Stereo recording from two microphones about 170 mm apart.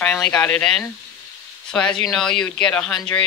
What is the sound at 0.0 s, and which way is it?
Speech, 5° left (ahead or behind).